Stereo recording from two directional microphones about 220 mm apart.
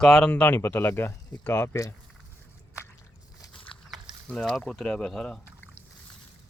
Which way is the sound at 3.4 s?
20° left (ahead or behind).